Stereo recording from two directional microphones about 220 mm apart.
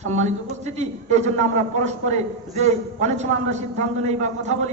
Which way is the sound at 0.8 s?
30° right (ahead or behind).